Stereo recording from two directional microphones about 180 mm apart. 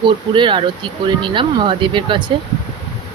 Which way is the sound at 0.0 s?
25° right (ahead or behind).